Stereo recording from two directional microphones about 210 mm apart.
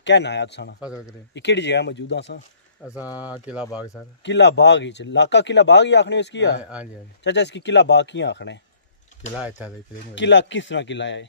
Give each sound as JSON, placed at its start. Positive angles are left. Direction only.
{"t": 0.0, "sound": "speech", "side_deg": 55}
{"t": 0.7, "sound": "speech", "side_deg": -5}
{"t": 1.3, "sound": "speech", "side_deg": 55}
{"t": 2.9, "sound": "speech", "side_deg": -5}
{"t": 4.2, "sound": "speech", "side_deg": 55}
{"t": 6.6, "sound": "speech", "side_deg": -5}
{"t": 7.2, "sound": "speech", "side_deg": 55}
{"t": 9.6, "sound": "speech", "side_deg": -5}
{"t": 10.1, "sound": "speech", "side_deg": 60}